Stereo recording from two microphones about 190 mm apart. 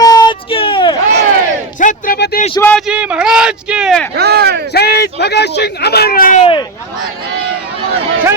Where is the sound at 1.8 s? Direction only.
50° left (ahead or behind).